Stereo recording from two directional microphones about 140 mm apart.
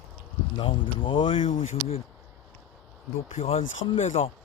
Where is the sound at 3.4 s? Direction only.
40° left (ahead or behind).